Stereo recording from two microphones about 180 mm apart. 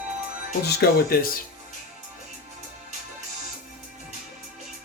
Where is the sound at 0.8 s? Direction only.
55° left (ahead or behind).